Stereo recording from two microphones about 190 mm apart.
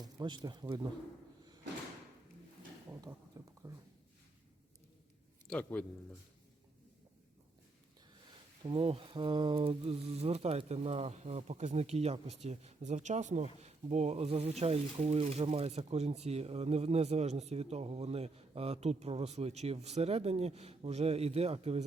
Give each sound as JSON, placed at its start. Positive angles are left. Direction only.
{"t": 0.0, "sound": "speech", "side_deg": -20}
{"t": 2.9, "sound": "a sound", "side_deg": -15}
{"t": 3.6, "sound": "speech", "side_deg": -20}
{"t": 5.5, "sound": "speech", "side_deg": 5}
{"t": 8.6, "sound": "speech", "side_deg": -30}